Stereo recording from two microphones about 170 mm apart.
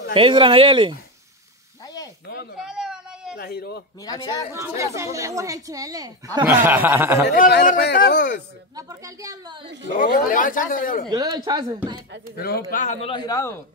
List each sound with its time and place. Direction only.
0.1 s a woman's voice: 30° right (ahead or behind)
2.3 s a sound: 70° left (ahead or behind)
2.6 s a sound: 5° right (ahead or behind)
3.3 s a man's voice: 65° left (ahead or behind)
4.0 s a man's voice: 20° left (ahead or behind)
4.5 s speech: 15° right (ahead or behind)
7.2 s a man's voice: 65° left (ahead or behind)
8.7 s a woman's voice: 20° right (ahead or behind)
9.9 s speech: 50° left (ahead or behind)
11.1 s a woman's voice: 25° right (ahead or behind)
12.7 s speech: 45° left (ahead or behind)
13.1 s a man's voice: 20° left (ahead or behind)